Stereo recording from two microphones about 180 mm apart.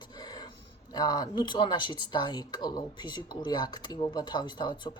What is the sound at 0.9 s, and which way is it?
Speech, 20° left (ahead or behind).